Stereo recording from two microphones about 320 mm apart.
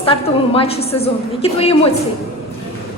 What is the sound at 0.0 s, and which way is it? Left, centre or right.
A woman's voice, centre.